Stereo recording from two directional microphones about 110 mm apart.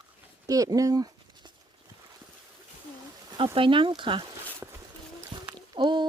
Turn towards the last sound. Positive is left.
turn(degrees=-50)  # may be behind; listen again after turning